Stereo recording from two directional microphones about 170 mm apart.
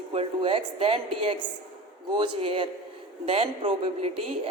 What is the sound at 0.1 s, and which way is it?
A woman's voice, 35° right (ahead or behind).